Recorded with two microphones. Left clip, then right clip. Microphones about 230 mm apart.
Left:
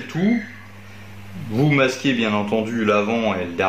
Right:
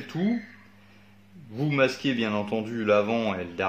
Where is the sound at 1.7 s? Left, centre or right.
Right.